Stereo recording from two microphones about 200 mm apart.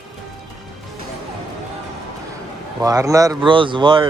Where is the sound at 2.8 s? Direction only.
15° right (ahead or behind).